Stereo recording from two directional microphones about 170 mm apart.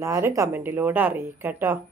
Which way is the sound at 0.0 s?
15° right (ahead or behind).